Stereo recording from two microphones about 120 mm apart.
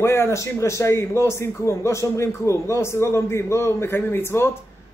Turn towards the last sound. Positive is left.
turn(degrees=20)  # may be behind; listen again after turning